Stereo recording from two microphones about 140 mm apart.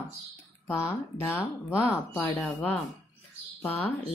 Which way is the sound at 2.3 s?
5° left (ahead or behind).